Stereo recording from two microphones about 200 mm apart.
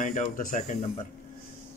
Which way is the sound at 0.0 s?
40° left (ahead or behind).